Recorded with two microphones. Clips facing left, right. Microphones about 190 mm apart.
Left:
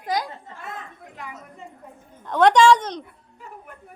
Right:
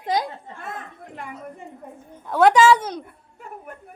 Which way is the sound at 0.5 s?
55° right (ahead or behind).